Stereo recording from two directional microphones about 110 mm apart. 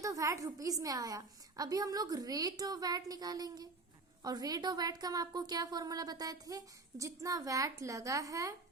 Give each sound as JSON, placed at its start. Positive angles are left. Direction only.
{"t": 0.0, "sound": "a woman's voice", "side_deg": -30}